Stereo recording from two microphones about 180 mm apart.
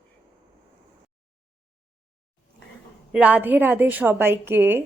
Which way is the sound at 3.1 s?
10° right (ahead or behind).